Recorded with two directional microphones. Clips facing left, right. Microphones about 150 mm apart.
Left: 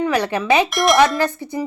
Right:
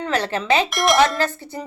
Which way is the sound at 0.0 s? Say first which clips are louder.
Left 4 dB; 15° left (ahead or behind).